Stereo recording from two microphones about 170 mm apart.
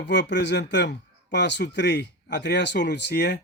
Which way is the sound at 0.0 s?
90° left.